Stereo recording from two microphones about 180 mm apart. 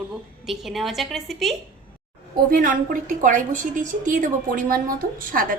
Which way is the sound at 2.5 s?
50° right (ahead or behind).